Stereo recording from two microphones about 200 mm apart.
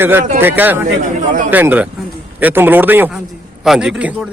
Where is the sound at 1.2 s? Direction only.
40° right (ahead or behind).